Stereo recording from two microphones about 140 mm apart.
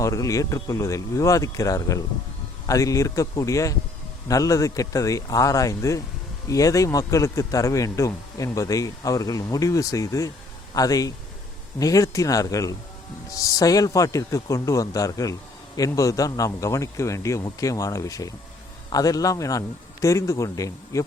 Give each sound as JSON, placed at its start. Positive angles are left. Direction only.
{"t": 0.0, "sound": "speech", "side_deg": 25}